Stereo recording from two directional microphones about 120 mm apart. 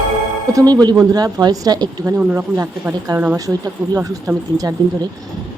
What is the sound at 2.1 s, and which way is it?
Speech, 15° right (ahead or behind).